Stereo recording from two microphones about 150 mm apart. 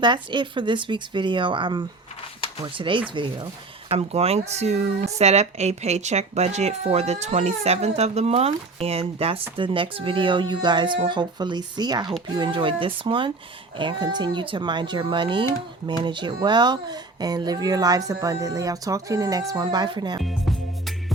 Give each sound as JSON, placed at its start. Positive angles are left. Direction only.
{"t": 0.0, "sound": "speech", "side_deg": -30}
{"t": 3.8, "sound": "speech", "side_deg": -40}
{"t": 20.2, "sound": "music", "side_deg": 0}